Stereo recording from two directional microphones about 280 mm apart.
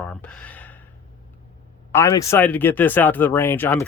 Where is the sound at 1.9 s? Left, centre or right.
Centre.